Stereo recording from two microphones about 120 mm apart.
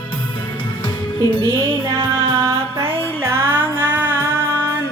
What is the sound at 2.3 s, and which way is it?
Music, 20° right (ahead or behind).